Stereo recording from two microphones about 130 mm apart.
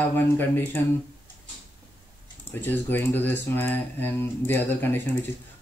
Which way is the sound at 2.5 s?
15° left (ahead or behind).